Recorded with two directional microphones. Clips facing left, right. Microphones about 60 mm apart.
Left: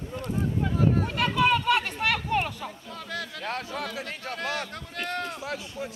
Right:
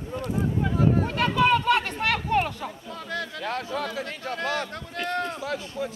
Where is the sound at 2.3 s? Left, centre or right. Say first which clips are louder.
Right 3 dB; centre.